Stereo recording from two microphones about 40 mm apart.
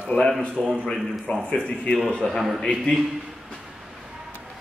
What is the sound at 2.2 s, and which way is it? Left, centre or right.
Speech, centre.